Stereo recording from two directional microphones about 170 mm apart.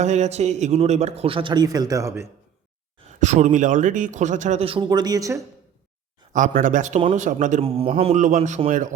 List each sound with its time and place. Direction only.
0.0 s a man's voice: 40° right (ahead or behind); by 2.2 s 20° right (ahead or behind)
3.2 s speech: 45° right (ahead or behind); by 5.5 s 20° right (ahead or behind)
6.3 s speech: 50° right (ahead or behind)
7.6 s speech: 35° right (ahead or behind)